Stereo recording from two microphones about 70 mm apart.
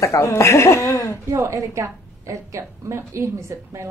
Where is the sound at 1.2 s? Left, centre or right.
Right.